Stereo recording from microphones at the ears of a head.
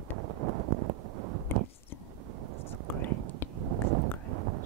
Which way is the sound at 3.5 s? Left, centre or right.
Right.